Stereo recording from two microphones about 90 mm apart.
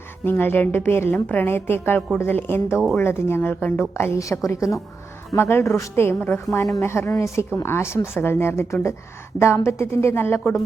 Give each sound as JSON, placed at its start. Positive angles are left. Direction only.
{"t": 0.3, "sound": "speech", "side_deg": 25}